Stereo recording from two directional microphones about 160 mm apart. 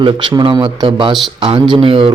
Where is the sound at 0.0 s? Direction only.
30° right (ahead or behind).